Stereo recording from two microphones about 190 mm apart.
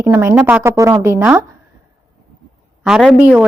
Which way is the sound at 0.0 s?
10° right (ahead or behind).